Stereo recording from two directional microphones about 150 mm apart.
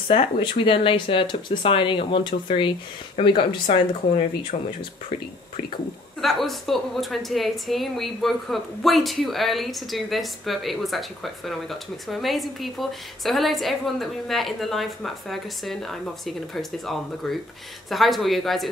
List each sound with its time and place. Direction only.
0.1 s speech: 40° left (ahead or behind)
6.2 s a woman's voice: centre (ahead or behind)